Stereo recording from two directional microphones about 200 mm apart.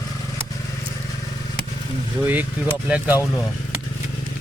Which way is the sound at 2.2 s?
10° right (ahead or behind).